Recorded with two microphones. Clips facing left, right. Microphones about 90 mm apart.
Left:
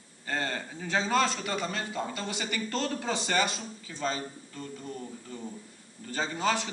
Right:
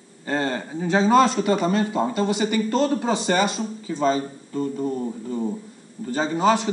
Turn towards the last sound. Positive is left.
turn(degrees=-20)  # may be behind; listen again after turning